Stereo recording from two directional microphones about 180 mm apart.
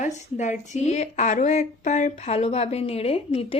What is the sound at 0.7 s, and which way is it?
A woman's voice, 40° left (ahead or behind).